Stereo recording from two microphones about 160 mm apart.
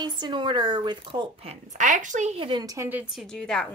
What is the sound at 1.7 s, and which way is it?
A woman's voice, 50° right (ahead or behind).